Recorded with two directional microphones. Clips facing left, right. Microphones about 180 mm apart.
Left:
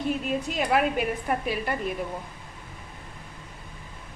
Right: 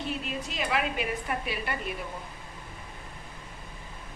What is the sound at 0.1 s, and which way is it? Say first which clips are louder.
A woman's voice: left 7 dB; 45° left (ahead or behind).